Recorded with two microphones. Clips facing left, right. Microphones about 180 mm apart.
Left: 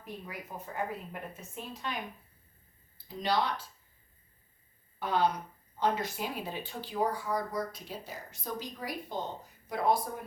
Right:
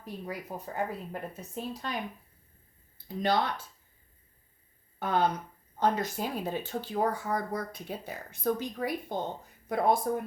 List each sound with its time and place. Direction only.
0.0 s a woman's voice: 35° right (ahead or behind)
3.2 s speech: 50° right (ahead or behind)
4.9 s speech: 50° right (ahead or behind)